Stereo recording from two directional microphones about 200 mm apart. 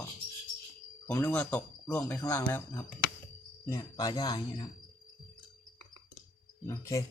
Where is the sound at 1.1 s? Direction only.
15° left (ahead or behind).